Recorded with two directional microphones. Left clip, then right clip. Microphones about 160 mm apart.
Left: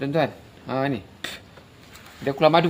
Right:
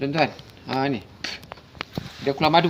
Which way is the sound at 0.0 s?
20° left (ahead or behind).